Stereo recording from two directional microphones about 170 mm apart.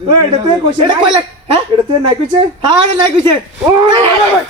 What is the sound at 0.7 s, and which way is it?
Speech, 30° right (ahead or behind).